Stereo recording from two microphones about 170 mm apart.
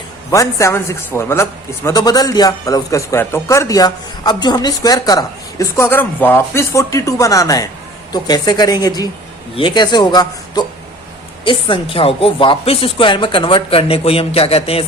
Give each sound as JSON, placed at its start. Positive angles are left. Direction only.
{"t": 0.3, "sound": "a man's voice", "side_deg": 20}